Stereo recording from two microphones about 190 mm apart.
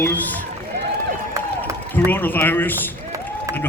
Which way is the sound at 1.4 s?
15° right (ahead or behind).